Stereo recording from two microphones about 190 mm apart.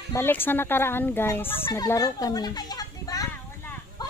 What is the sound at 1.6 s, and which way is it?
Children playing, 20° left (ahead or behind).